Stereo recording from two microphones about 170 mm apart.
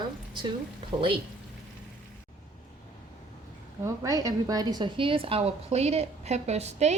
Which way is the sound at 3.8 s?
20° right (ahead or behind).